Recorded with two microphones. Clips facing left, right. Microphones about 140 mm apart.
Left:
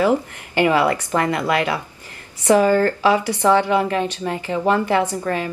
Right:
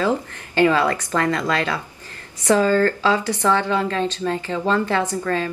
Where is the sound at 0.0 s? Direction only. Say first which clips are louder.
Left 3 dB; 15° left (ahead or behind).